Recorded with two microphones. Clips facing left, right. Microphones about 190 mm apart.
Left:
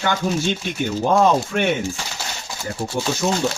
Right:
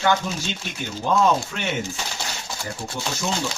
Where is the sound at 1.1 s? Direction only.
55° left (ahead or behind).